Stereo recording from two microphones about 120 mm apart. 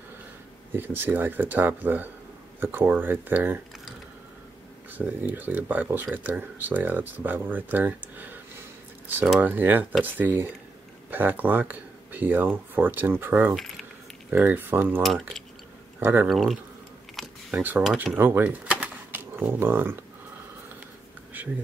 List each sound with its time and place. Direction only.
0.7 s speech: 15° right (ahead or behind)
4.9 s speech: 15° right (ahead or behind)
15.0 s speech: centre (ahead or behind)
16.0 s speech: 15° right (ahead or behind)
16.3 s speech: centre (ahead or behind)
17.1 s a sound: centre (ahead or behind)
17.6 s speech: 15° right (ahead or behind)